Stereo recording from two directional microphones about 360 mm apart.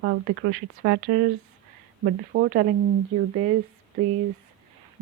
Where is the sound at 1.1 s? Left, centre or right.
Right.